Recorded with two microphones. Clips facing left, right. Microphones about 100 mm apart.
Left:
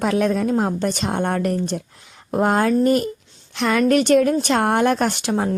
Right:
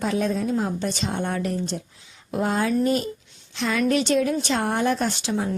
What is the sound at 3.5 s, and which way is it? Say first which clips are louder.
A woman's voice: left 5 dB; 60° left (ahead or behind).